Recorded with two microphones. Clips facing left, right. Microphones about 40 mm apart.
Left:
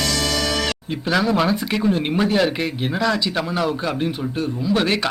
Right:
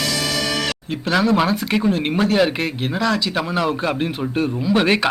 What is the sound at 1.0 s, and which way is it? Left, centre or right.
Speech, centre.